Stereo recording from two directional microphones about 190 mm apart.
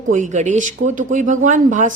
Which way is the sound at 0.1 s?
40° right (ahead or behind).